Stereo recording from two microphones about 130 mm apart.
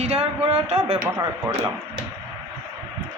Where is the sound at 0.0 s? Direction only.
50° right (ahead or behind).